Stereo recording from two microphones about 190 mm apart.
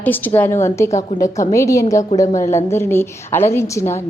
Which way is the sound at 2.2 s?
40° left (ahead or behind).